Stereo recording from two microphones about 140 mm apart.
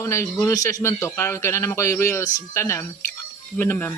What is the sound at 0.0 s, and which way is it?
A man's voice, 20° left (ahead or behind).